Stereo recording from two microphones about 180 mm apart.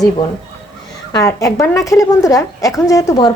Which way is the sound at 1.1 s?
20° left (ahead or behind).